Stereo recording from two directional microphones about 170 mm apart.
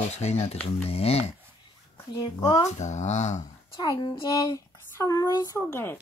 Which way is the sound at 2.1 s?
25° left (ahead or behind).